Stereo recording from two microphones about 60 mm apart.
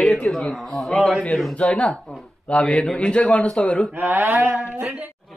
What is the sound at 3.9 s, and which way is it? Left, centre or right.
Speech, right.